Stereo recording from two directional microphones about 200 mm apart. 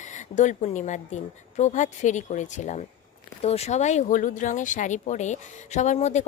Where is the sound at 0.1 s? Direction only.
35° left (ahead or behind).